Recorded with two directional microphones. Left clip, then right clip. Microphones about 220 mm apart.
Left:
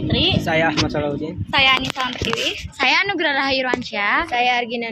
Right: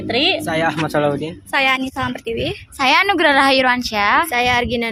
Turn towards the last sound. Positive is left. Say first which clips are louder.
# right 2 dB
turn(degrees=-50)  # may be behind; listen again after turning